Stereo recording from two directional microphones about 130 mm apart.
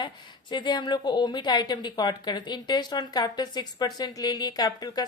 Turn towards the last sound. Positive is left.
turn(degrees=30)  # may be behind; listen again after turning